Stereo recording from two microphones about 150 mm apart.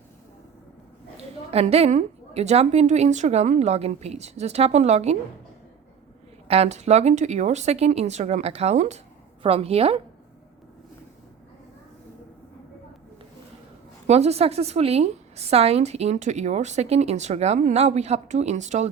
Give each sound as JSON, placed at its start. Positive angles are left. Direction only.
{"t": 1.1, "sound": "a woman's voice", "side_deg": -45}
{"t": 6.5, "sound": "a woman's voice", "side_deg": -45}
{"t": 14.1, "sound": "a woman's voice", "side_deg": -45}